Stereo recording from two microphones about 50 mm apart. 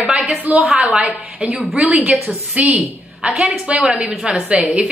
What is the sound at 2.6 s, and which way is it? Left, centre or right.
A woman's voice, right.